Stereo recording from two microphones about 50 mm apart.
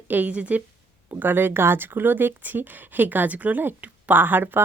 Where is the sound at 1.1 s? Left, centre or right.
Right.